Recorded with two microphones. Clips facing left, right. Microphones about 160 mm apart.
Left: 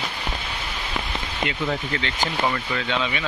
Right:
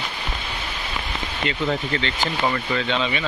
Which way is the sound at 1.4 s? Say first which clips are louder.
Right 2 dB; 5° left (ahead or behind).